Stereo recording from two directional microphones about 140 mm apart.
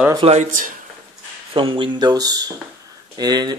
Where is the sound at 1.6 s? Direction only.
35° right (ahead or behind).